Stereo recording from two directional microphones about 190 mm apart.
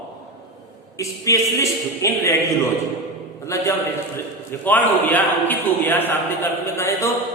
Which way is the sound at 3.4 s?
15° left (ahead or behind).